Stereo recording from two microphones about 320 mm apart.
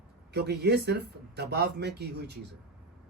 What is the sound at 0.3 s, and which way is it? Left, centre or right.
Speech, right.